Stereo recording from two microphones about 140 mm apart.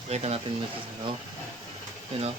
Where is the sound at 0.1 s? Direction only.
50° right (ahead or behind).